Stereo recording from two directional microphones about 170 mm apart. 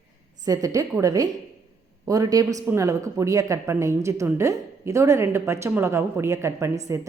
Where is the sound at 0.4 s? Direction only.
20° right (ahead or behind).